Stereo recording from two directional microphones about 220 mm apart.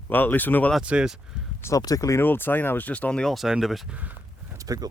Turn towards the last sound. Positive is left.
turn(degrees=-15)  # may be behind; listen again after turning